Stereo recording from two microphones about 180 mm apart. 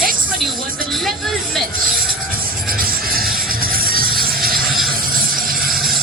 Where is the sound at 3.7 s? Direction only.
55° right (ahead or behind).